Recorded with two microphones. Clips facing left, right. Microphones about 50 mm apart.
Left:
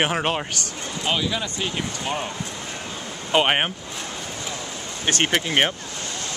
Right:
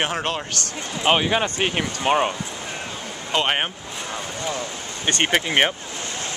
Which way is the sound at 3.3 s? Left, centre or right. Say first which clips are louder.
Left 2 dB; centre.